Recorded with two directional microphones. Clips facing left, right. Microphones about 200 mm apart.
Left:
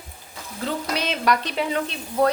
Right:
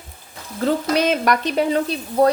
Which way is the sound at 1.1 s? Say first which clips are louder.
Right 4 dB; 45° right (ahead or behind).